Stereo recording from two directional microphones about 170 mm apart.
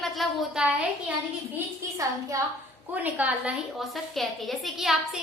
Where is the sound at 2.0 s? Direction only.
20° right (ahead or behind).